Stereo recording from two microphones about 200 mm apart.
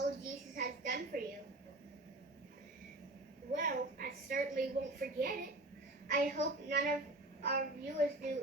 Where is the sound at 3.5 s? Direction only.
45° right (ahead or behind).